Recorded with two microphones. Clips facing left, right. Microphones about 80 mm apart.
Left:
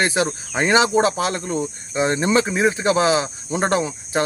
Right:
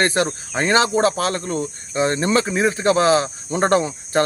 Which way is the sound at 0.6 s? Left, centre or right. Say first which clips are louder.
Even; centre.